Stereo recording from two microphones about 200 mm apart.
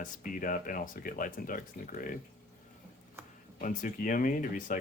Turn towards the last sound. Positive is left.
turn(degrees=40)  # may be behind; listen again after turning